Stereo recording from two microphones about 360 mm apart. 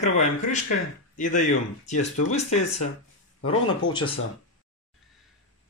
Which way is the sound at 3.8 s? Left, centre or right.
Centre.